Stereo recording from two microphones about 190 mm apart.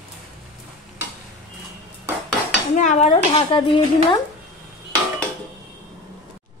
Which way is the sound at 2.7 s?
40° left (ahead or behind).